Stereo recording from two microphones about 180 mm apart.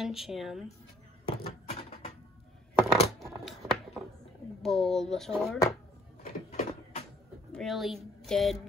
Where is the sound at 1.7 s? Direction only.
35° left (ahead or behind).